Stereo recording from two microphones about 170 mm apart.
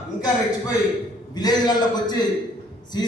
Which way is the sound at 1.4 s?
25° left (ahead or behind).